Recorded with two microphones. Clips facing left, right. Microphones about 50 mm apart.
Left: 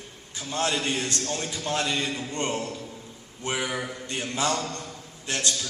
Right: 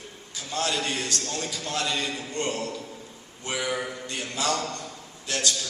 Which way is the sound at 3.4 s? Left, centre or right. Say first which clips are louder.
Even; centre.